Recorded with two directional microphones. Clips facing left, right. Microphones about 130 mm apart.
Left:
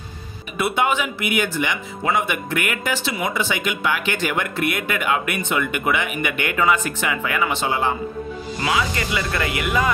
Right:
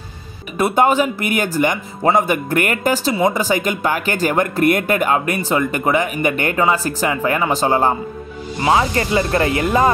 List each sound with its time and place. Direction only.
0.6 s a man's voice: 40° right (ahead or behind)